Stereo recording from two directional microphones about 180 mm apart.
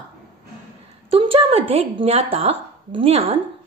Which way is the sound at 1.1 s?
30° right (ahead or behind).